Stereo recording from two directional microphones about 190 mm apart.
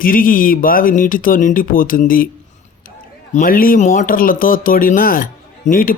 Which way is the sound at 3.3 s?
45° left (ahead or behind).